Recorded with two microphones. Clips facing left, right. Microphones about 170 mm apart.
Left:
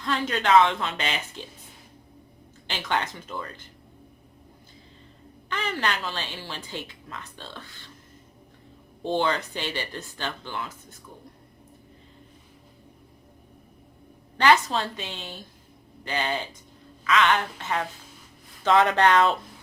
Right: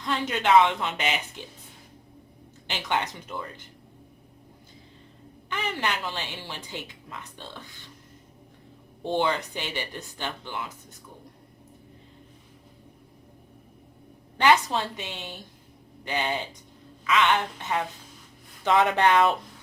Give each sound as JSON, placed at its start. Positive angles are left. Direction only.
{"t": 0.0, "sound": "a woman's voice", "side_deg": -15}
{"t": 2.6, "sound": "a woman's voice", "side_deg": -15}
{"t": 5.5, "sound": "a woman's voice", "side_deg": -15}
{"t": 9.0, "sound": "a woman's voice", "side_deg": -15}
{"t": 14.3, "sound": "a woman's voice", "side_deg": -15}